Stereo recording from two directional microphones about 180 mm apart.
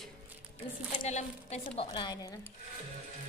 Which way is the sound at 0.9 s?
45° left (ahead or behind).